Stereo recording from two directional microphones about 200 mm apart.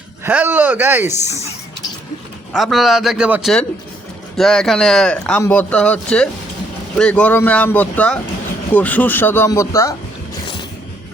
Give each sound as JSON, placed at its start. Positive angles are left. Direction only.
{"t": 0.3, "sound": "speech", "side_deg": -10}
{"t": 1.2, "sound": "speech", "side_deg": 35}
{"t": 2.5, "sound": "speech", "side_deg": 0}